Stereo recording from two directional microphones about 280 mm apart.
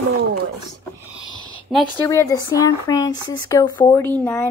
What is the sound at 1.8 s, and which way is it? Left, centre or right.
Speech, centre.